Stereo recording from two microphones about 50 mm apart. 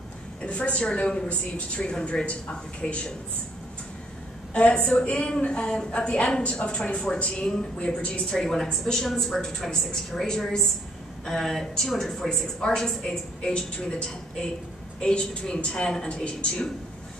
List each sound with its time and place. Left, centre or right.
0.4 s a woman's voice: left
4.6 s a woman's voice: left